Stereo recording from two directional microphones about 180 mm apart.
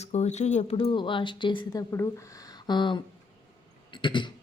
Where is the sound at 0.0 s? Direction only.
40° left (ahead or behind).